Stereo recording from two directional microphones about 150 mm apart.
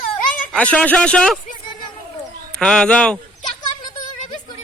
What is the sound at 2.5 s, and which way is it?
Speech, 5° left (ahead or behind).